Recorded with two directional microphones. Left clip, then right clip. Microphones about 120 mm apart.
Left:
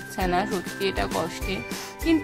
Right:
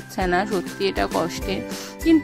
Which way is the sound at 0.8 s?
50° right (ahead or behind).